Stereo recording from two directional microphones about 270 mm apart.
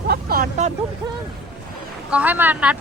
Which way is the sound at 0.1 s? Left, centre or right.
Right.